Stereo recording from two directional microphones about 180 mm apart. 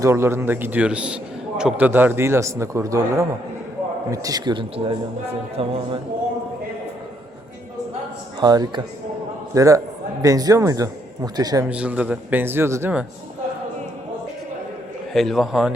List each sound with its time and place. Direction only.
0.0 s a man's voice: 15° right (ahead or behind); by 5.7 s 35° right (ahead or behind)
8.4 s a man's voice: 20° right (ahead or behind)
11.7 s a man's voice: 5° right (ahead or behind)
15.1 s a man's voice: centre (ahead or behind)